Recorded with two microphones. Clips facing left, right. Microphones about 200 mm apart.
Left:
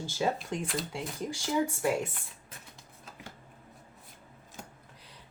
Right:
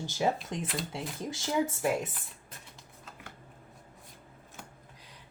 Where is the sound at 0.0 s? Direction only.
15° right (ahead or behind).